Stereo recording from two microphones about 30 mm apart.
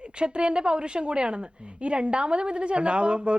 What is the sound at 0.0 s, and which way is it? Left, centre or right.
A woman's voice, right.